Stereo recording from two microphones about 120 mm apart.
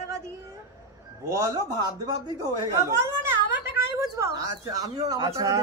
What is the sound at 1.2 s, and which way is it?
A man's voice, 25° right (ahead or behind).